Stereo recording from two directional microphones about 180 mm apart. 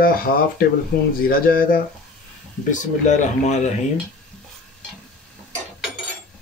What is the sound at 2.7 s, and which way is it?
Speech, 40° left (ahead or behind).